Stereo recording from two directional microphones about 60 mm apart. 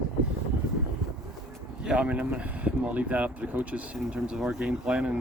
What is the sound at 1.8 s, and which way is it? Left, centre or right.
Speech, centre.